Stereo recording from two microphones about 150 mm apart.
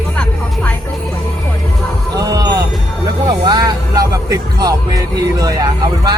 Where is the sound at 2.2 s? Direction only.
25° right (ahead or behind).